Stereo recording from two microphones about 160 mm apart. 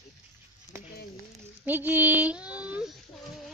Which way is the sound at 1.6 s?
10° right (ahead or behind).